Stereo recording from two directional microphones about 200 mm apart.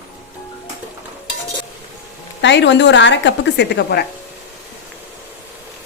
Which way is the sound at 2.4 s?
60° left (ahead or behind).